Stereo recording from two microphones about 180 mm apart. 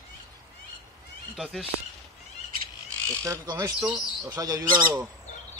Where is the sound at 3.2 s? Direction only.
20° right (ahead or behind).